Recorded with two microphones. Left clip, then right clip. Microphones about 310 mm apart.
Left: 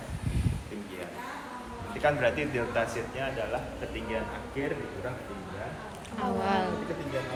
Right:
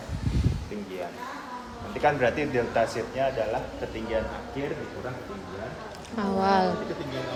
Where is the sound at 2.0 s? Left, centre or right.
Right.